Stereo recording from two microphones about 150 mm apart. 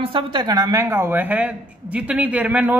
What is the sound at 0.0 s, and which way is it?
A woman's voice, 35° right (ahead or behind).